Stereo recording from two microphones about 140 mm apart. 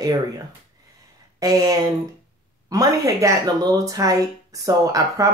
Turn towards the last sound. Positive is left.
turn(degrees=-25)  # may be behind; listen again after turning